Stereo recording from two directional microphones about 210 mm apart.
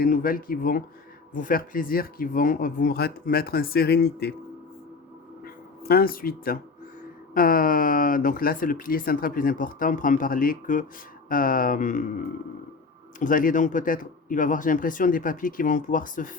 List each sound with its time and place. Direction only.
0.0 s speech: 40° left (ahead or behind)
5.9 s speech: 45° left (ahead or behind)
13.1 s speech: 40° left (ahead or behind)